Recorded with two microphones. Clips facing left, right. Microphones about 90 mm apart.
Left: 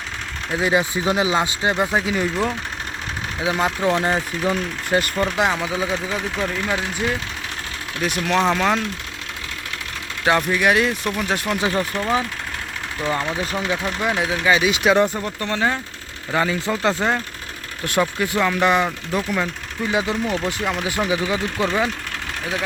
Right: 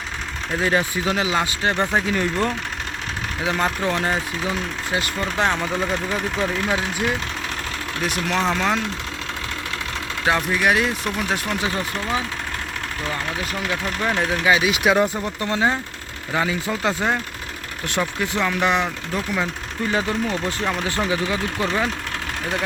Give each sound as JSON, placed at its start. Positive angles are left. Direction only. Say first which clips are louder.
{"t": 0.6, "sound": "speech", "louder": "left 2 dB", "side_deg": 15}
{"t": 4.4, "sound": "speech", "louder": "left 3 dB", "side_deg": 45}
{"t": 5.2, "sound": "speech", "louder": "left 1 dB", "side_deg": 10}
{"t": 10.2, "sound": "speech", "louder": "left 2 dB", "side_deg": 0}
{"t": 13.7, "sound": "speech", "louder": "right 1 dB", "side_deg": 20}
{"t": 14.1, "sound": "speech", "louder": "even", "side_deg": 5}
{"t": 16.3, "sound": "speech", "louder": "left 2 dB", "side_deg": -5}
{"t": 18.2, "sound": "speech", "louder": "left 2 dB", "side_deg": 5}
{"t": 19.9, "sound": "speech", "louder": "left 1 dB", "side_deg": 15}